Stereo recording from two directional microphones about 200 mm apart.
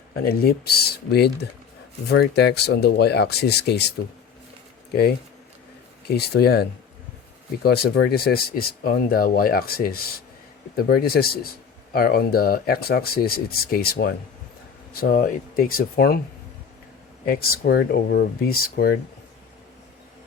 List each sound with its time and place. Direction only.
0.3 s speech: 50° left (ahead or behind)
6.1 s speech: 55° left (ahead or behind)
17.2 s speech: 50° left (ahead or behind)